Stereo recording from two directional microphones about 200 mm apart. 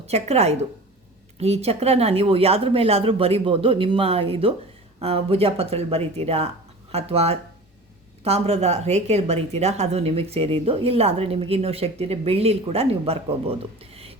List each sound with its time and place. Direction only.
0.0 s a woman's voice: 30° right (ahead or behind)